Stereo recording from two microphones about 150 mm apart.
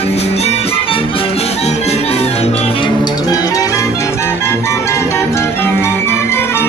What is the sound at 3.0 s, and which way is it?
Music, 25° left (ahead or behind).